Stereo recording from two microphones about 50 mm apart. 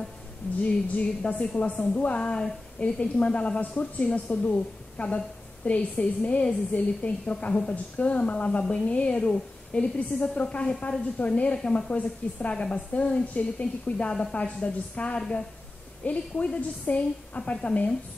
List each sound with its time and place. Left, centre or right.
0.6 s a woman's voice: left